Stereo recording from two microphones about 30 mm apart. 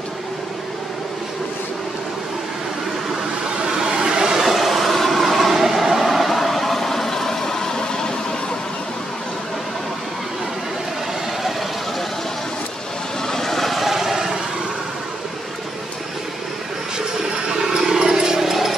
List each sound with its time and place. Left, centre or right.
3.6 s vehicle: right
4.3 s train: centre
4.6 s vehicle: centre; by 8.1 s left
13.3 s vehicle: centre
17.2 s a sound: centre
18.5 s a sound: centre